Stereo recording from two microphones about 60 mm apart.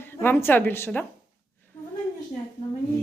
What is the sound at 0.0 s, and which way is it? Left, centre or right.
Speech, left.